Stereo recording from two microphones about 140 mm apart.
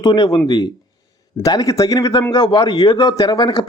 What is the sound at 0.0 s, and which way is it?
A man's voice, 30° left (ahead or behind).